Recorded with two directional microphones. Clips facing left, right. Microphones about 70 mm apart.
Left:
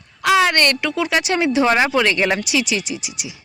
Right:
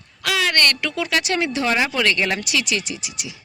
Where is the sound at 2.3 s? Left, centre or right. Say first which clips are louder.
Left 3 dB; centre.